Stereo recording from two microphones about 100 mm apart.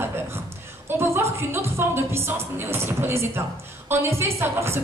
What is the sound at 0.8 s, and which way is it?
A woman's voice, 25° right (ahead or behind).